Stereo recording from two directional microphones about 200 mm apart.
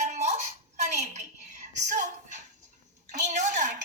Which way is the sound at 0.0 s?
35° right (ahead or behind).